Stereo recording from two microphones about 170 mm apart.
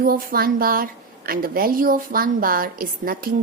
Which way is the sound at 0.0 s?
60° right (ahead or behind).